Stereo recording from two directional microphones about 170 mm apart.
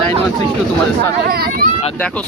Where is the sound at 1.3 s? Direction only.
60° right (ahead or behind).